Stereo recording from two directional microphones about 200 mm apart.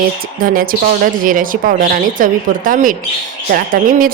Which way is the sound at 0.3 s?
45° right (ahead or behind).